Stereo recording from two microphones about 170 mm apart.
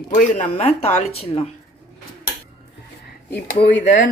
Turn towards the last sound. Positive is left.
turn(degrees=50)  # may be behind; listen again after turning